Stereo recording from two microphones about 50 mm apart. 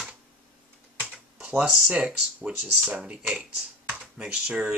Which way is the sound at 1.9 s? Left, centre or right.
Right.